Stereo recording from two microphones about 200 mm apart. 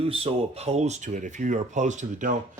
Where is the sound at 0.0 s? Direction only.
30° right (ahead or behind).